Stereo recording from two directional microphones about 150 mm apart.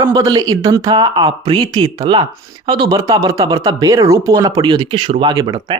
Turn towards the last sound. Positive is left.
turn(degrees=-25)  # may be behind; listen again after turning